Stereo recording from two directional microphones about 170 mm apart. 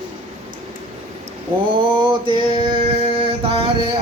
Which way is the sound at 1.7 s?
30° right (ahead or behind).